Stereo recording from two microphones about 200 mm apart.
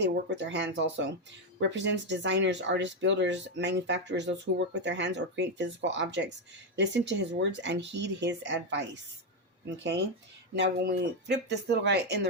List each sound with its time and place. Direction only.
0.0 s speech: 60° right (ahead or behind)
10.5 s speech: 55° right (ahead or behind)